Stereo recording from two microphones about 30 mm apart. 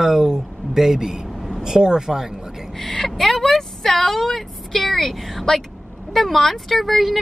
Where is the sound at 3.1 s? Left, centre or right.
Centre.